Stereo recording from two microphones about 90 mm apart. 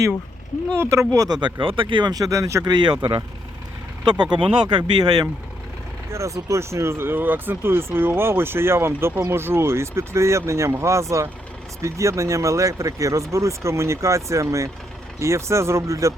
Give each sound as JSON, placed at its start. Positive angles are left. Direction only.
{"t": 0.8, "sound": "speech", "side_deg": -35}
{"t": 1.4, "sound": "speech", "side_deg": -60}
{"t": 2.1, "sound": "speech", "side_deg": -40}
{"t": 2.7, "sound": "speech", "side_deg": -55}
{"t": 6.1, "sound": "speech", "side_deg": -35}